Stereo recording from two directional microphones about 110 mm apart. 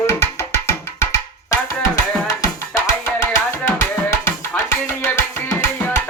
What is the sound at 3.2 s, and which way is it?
Music, 20° left (ahead or behind).